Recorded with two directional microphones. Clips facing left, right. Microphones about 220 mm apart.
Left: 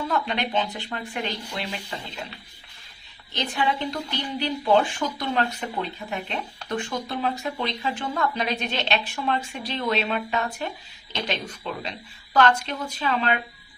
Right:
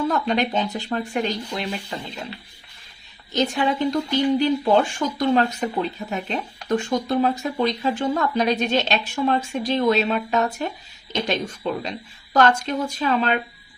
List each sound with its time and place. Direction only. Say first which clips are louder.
0.1 s speech: right 4 dB; 45° right (ahead or behind)
3.3 s speech: right 5 dB; 45° right (ahead or behind)